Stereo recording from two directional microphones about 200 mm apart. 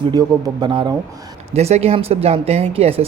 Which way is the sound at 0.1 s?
20° right (ahead or behind).